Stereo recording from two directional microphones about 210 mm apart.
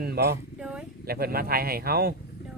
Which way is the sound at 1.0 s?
45° right (ahead or behind).